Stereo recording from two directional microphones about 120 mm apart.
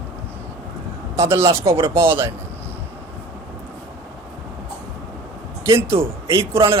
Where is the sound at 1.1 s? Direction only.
25° right (ahead or behind).